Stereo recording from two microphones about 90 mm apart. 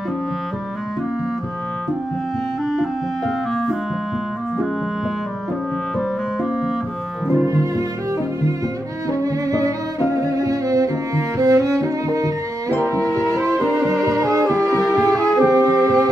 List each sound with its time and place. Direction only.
2.7 s music: centre (ahead or behind)
7.2 s music: 20° right (ahead or behind)
9.2 s music: 40° right (ahead or behind)
14.0 s music: 40° right (ahead or behind)